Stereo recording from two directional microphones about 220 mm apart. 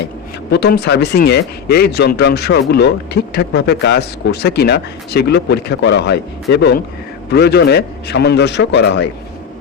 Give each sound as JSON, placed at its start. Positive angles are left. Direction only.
{"t": 0.5, "sound": "speech", "side_deg": 50}